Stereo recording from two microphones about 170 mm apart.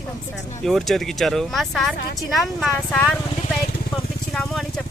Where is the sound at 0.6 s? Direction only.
Centre (ahead or behind).